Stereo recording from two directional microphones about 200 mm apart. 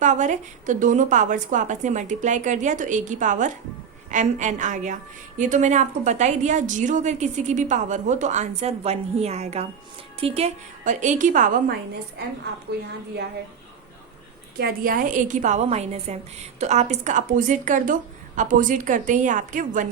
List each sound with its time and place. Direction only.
0.0 s a woman's voice: 40° right (ahead or behind)
14.6 s a woman's voice: 45° right (ahead or behind)